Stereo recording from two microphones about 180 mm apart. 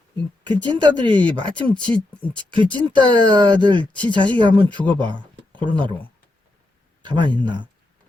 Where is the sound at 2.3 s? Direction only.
25° right (ahead or behind).